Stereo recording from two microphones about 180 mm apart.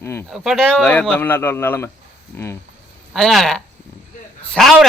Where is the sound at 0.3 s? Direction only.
Centre (ahead or behind).